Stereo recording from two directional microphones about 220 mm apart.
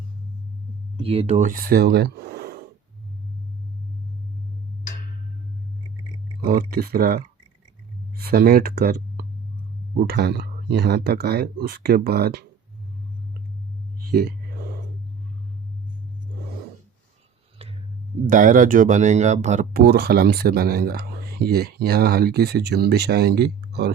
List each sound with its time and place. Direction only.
0.9 s speech: 25° right (ahead or behind); by 2.6 s 45° right (ahead or behind)
6.4 s speech: 40° right (ahead or behind)
14.0 s a sound: 45° right (ahead or behind)
18.3 s speech: 40° right (ahead or behind)